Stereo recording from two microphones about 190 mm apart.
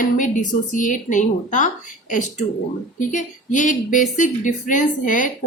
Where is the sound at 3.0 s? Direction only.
40° left (ahead or behind).